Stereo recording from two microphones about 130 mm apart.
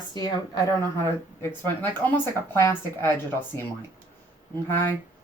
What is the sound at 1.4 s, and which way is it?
Speech, 15° left (ahead or behind).